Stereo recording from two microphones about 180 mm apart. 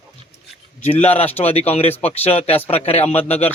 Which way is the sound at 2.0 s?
35° left (ahead or behind).